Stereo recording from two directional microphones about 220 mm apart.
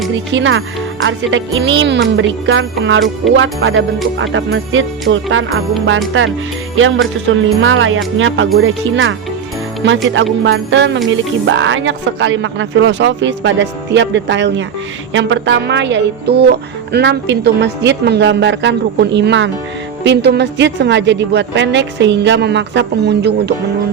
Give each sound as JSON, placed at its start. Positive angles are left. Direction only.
{"t": 0.3, "sound": "a man's voice", "side_deg": -60}
{"t": 6.7, "sound": "a man's voice", "side_deg": -65}